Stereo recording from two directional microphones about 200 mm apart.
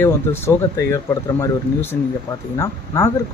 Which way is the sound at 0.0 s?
10° left (ahead or behind).